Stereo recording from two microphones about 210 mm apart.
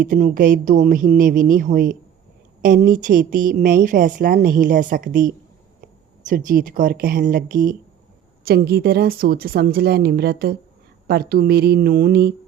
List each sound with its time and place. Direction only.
0.0 s a woman's voice: 40° right (ahead or behind)